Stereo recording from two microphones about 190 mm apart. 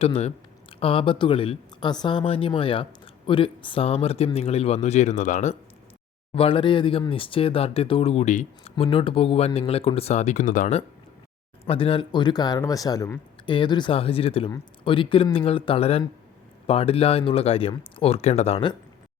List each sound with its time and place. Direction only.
0.0 s a man's voice: 30° left (ahead or behind)
6.3 s a man's voice: 30° left (ahead or behind); by 10.8 s 45° left (ahead or behind)
11.6 s a man's voice: 30° left (ahead or behind)